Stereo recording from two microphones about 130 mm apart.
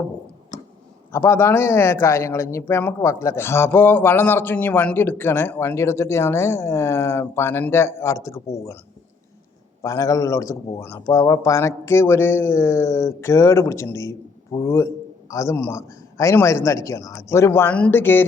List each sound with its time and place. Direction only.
1.1 s speech: 20° left (ahead or behind)
9.8 s a man's voice: 25° left (ahead or behind)